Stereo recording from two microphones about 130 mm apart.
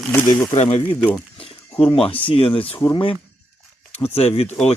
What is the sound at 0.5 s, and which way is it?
Speech, 55° left (ahead or behind).